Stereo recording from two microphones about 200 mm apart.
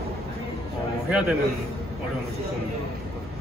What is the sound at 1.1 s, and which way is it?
Speech, 5° right (ahead or behind).